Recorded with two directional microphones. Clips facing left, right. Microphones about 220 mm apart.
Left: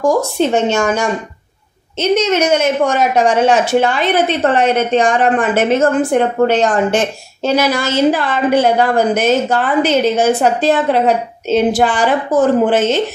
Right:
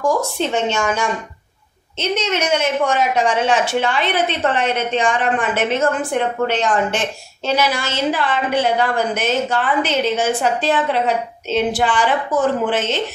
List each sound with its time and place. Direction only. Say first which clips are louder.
0.0 s a woman's voice: left 5 dB; 40° left (ahead or behind)